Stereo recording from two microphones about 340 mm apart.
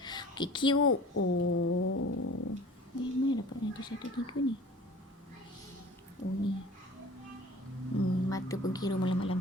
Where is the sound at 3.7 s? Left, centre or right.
Centre.